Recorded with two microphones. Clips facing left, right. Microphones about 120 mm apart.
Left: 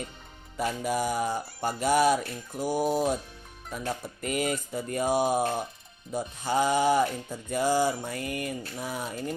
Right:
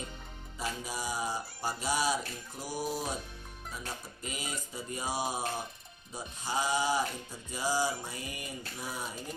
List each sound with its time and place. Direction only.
0.5 s mantra: 60° left (ahead or behind)
2.6 s a sound: 55° left (ahead or behind)
3.7 s mantra: 60° left (ahead or behind)